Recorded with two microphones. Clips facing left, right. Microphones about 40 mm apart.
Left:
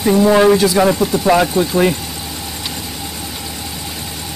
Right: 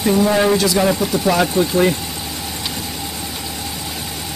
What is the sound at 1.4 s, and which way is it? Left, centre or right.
Speech, centre.